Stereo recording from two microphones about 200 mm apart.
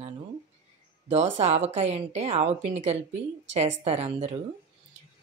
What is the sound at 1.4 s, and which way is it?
A woman's voice, 35° right (ahead or behind).